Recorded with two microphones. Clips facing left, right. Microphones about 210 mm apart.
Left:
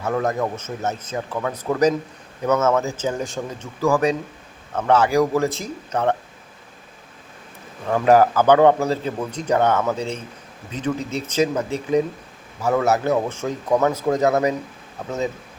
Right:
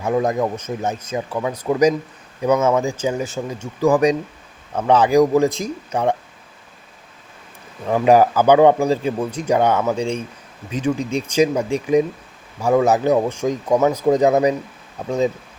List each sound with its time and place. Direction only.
0.0 s a man's voice: 15° right (ahead or behind)
7.9 s a man's voice: 15° right (ahead or behind)